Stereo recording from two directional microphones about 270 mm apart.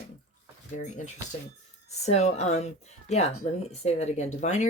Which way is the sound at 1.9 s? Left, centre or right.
Left.